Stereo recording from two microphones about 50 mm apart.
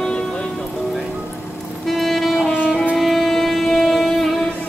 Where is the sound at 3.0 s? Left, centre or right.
Centre.